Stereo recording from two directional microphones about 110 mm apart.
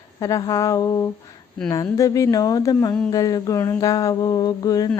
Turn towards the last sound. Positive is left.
turn(degrees=35)  # may be behind; listen again after turning